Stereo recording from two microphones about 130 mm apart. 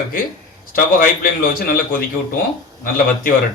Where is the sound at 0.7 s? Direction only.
90° left.